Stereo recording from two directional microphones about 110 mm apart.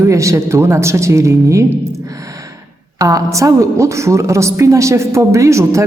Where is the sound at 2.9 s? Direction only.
30° right (ahead or behind).